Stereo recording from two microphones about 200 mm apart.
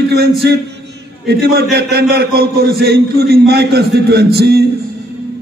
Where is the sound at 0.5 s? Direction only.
55° right (ahead or behind).